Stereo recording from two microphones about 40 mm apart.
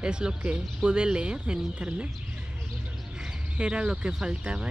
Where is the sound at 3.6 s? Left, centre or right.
Right.